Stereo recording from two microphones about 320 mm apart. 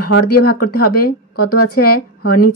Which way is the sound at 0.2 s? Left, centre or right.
Left.